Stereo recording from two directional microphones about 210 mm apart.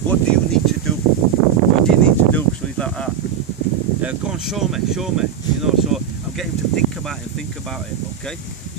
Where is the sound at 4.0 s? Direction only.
5° right (ahead or behind).